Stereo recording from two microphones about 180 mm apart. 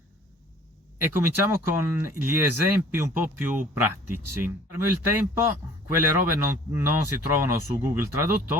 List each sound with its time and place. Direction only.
0.9 s a man's voice: 10° right (ahead or behind)